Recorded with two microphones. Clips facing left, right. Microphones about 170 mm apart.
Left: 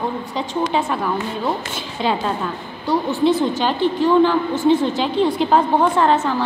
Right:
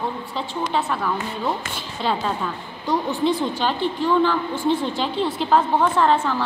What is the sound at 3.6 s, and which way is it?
Speech, 10° left (ahead or behind).